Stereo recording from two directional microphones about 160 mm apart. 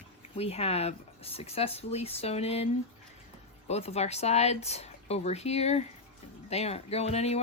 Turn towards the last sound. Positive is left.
turn(degrees=40)  # may be behind; listen again after turning